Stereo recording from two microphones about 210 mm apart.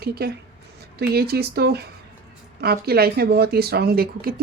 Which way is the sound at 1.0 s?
50° right (ahead or behind).